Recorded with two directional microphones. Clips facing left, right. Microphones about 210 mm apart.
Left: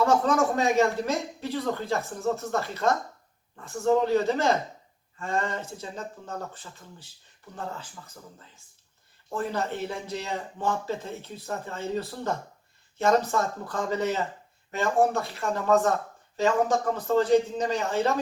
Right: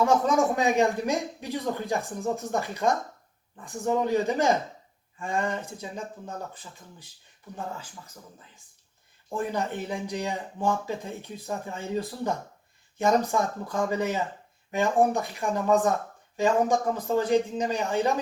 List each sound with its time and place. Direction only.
0.0 s speech: 15° right (ahead or behind)
9.3 s speech: 15° right (ahead or behind)